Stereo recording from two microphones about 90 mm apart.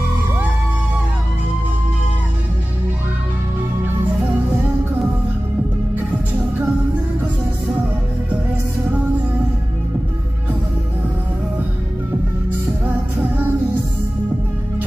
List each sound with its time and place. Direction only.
12.8 s music: 20° right (ahead or behind)